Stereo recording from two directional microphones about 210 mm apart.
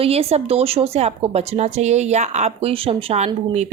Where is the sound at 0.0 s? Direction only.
30° right (ahead or behind).